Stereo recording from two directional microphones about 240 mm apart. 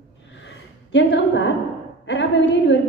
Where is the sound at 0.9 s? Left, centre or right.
Left.